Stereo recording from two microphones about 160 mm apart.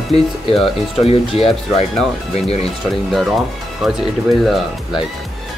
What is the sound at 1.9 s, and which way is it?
Speech, centre (ahead or behind).